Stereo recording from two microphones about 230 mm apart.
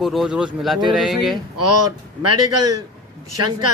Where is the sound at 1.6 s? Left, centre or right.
Right.